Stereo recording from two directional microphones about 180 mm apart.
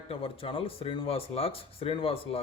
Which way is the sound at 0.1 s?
30° left (ahead or behind).